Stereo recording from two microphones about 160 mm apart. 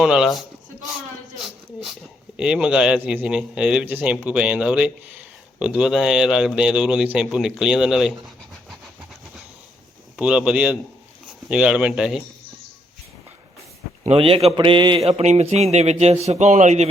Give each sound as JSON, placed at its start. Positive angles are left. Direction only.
{"t": 0.0, "sound": "a man's voice", "side_deg": -5}
{"t": 2.3, "sound": "a man's voice", "side_deg": -5}
{"t": 10.2, "sound": "a man's voice", "side_deg": -5}
{"t": 14.0, "sound": "a man's voice", "side_deg": -40}